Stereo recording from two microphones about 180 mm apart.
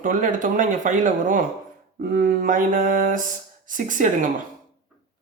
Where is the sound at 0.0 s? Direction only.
45° right (ahead or behind).